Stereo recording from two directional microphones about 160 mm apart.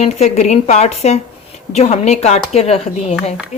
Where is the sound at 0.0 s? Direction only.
45° left (ahead or behind).